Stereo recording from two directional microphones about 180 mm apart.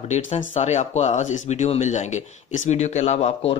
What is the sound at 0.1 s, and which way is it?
Speech, 35° left (ahead or behind).